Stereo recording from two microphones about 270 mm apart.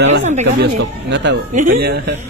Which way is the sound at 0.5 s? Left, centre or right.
Right.